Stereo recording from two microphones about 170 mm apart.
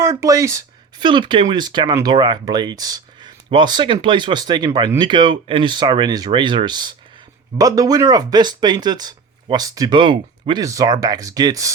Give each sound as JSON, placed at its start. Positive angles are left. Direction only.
{"t": 0.0, "sound": "speech", "side_deg": -15}